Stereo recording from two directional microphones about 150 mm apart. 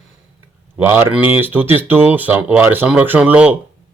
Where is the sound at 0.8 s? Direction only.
15° right (ahead or behind).